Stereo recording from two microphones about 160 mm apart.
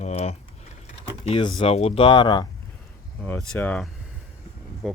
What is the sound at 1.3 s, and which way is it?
Speech, 30° left (ahead or behind).